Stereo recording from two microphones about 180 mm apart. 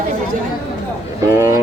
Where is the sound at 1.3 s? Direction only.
15° right (ahead or behind).